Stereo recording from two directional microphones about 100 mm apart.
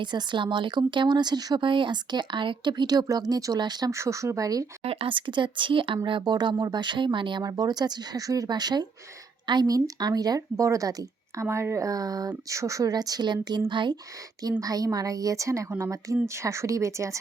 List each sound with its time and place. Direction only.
0.0 s speech: 50° right (ahead or behind)
3.9 s speech: 30° right (ahead or behind)
4.8 s speech: 75° right (ahead or behind); by 14.0 s 50° right (ahead or behind)
14.6 s speech: 35° right (ahead or behind)